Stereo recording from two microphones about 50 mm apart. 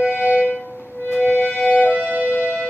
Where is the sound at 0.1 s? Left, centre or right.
Left.